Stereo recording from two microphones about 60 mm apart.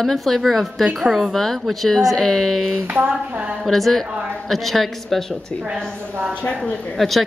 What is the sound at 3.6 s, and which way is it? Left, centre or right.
A woman's voice, centre.